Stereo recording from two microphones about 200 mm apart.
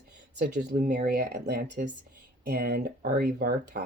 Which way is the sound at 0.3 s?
55° right (ahead or behind).